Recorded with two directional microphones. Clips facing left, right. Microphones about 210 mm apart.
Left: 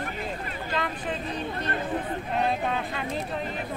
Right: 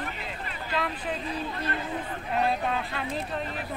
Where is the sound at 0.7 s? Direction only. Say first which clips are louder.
Even; centre (ahead or behind).